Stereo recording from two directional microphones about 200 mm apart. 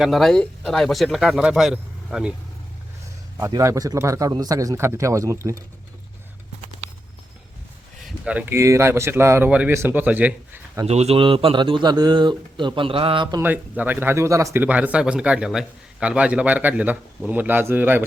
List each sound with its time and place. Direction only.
0.0 s speech: centre (ahead or behind)
3.3 s speech: 15° right (ahead or behind)
8.2 s speech: 5° right (ahead or behind)
10.8 s speech: 30° right (ahead or behind)
13.4 s speech: 10° right (ahead or behind)